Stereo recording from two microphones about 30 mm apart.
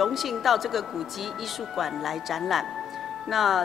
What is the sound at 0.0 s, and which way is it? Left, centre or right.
Speech, centre.